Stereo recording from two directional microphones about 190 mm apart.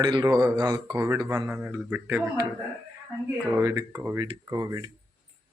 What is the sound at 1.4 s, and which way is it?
A man's voice, 5° right (ahead or behind).